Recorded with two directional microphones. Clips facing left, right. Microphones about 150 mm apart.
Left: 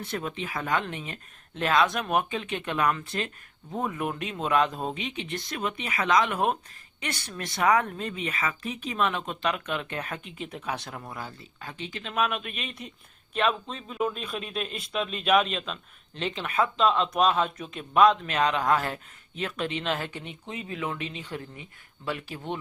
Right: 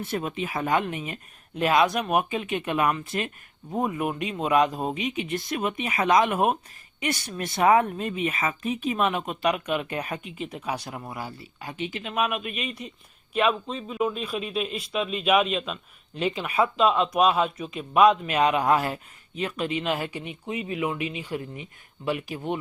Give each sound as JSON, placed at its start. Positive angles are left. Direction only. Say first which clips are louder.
{"t": 0.0, "sound": "speech", "louder": "right 4 dB", "side_deg": -20}